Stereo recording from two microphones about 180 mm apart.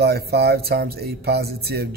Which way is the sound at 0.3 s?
60° right (ahead or behind).